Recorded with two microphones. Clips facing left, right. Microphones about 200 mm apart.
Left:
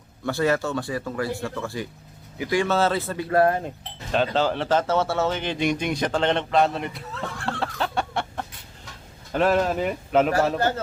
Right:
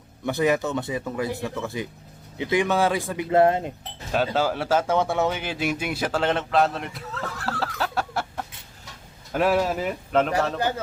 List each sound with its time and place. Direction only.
0.3 s speech: 20° right (ahead or behind)
4.1 s speech: 5° right (ahead or behind)